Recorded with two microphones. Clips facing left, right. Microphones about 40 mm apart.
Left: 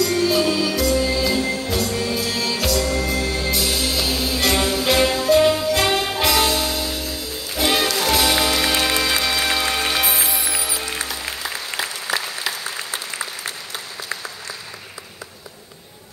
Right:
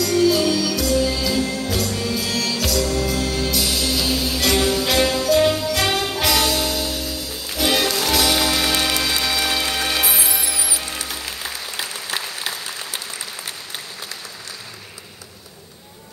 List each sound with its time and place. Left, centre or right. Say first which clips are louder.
0.0 s music: right 1 dB; left